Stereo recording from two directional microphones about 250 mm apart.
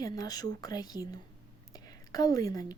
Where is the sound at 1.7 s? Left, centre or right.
Centre.